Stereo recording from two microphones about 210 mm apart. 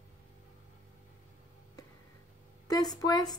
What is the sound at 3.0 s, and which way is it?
Speech, 20° left (ahead or behind).